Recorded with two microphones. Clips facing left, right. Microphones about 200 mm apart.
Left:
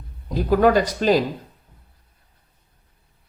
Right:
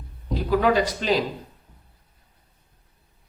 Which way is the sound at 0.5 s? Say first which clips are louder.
Left 4 dB; 45° left (ahead or behind).